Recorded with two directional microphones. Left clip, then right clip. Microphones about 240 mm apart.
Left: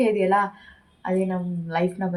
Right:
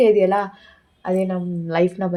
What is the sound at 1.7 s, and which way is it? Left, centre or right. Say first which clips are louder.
Speech: right 6 dB; right.